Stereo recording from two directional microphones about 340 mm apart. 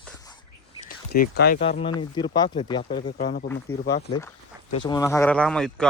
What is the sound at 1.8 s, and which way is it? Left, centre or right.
Speech, centre.